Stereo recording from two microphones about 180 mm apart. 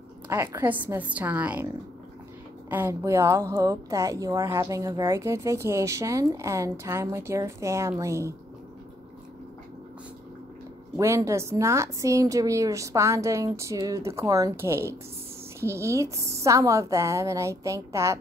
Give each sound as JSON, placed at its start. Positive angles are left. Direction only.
{"t": 0.3, "sound": "a woman's voice", "side_deg": -15}
{"t": 2.7, "sound": "a woman's voice", "side_deg": -15}
{"t": 11.0, "sound": "a woman's voice", "side_deg": -15}